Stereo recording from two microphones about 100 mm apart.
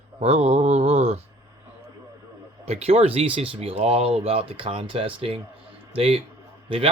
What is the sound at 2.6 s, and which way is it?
Speech, 90° right.